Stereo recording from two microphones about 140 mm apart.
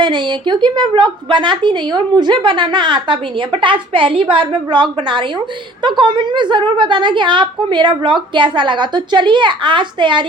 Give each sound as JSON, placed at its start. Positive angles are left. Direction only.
{"t": 0.0, "sound": "a woman's voice", "side_deg": -35}